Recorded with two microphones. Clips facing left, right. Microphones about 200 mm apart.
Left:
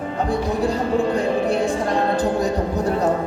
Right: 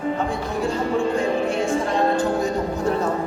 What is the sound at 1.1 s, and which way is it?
Music, 35° left (ahead or behind).